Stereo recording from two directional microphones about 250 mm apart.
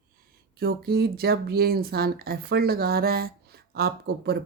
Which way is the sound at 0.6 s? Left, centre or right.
Right.